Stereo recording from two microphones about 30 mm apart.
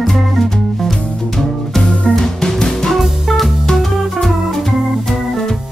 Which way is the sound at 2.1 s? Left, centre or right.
Centre.